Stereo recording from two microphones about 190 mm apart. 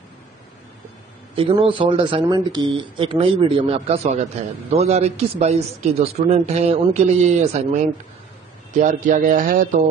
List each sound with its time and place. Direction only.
1.3 s speech: 25° right (ahead or behind); by 9.8 s 45° right (ahead or behind)